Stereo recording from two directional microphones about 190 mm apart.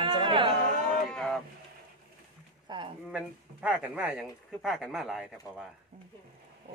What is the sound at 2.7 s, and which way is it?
Speech, 20° right (ahead or behind).